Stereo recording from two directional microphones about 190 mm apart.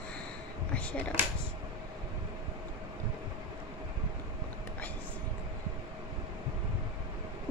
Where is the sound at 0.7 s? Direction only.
10° left (ahead or behind).